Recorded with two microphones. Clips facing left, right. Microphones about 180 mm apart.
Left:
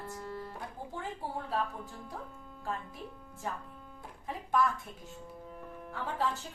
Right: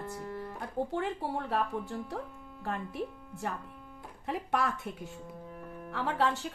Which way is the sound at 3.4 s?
70° right (ahead or behind).